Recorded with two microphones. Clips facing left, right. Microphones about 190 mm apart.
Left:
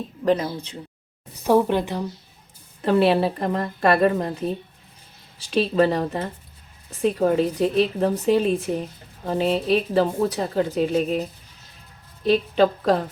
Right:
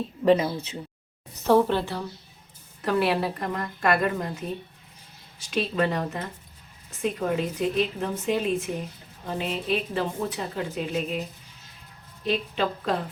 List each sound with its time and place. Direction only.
0.3 s speech: 5° right (ahead or behind)
1.5 s a woman's voice: 10° left (ahead or behind); by 13.1 s 40° left (ahead or behind)